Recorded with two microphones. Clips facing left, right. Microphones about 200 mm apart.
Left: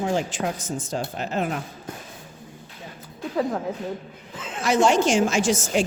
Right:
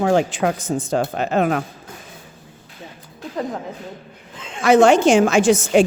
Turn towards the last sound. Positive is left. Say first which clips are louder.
# right 7 dB
turn(degrees=-60)  # may be behind; listen again after turning